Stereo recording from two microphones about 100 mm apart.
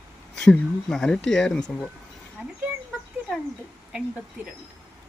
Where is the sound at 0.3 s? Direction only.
5° left (ahead or behind).